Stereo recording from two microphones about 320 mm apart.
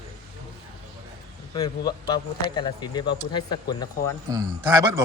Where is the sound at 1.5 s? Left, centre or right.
Centre.